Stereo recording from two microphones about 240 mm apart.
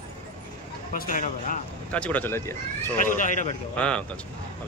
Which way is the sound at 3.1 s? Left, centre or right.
Left.